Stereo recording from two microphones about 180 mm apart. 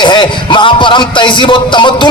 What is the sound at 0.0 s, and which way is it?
Speech, 25° left (ahead or behind).